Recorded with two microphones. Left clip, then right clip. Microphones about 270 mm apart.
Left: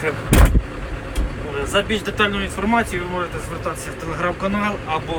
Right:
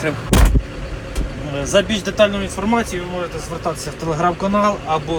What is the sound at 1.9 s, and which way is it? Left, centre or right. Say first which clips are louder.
Speech: right 4 dB; centre.